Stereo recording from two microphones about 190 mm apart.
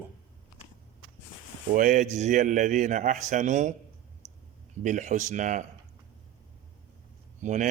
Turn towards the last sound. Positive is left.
turn(degrees=-40)  # may be behind; listen again after turning